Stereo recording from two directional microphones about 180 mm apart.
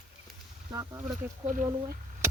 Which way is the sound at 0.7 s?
20° right (ahead or behind).